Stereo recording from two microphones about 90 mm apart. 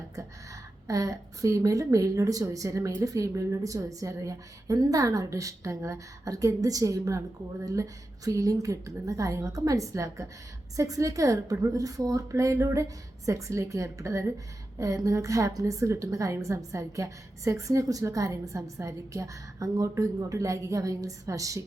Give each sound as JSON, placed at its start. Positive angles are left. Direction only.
{"t": 0.9, "sound": "a woman's voice", "side_deg": -40}